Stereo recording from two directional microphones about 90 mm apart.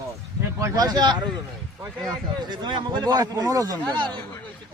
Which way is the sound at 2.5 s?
55° right (ahead or behind).